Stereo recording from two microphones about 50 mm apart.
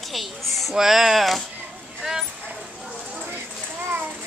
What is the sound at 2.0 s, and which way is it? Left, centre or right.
Speech, centre.